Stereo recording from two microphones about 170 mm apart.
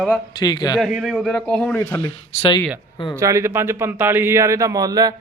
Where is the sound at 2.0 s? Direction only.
30° left (ahead or behind).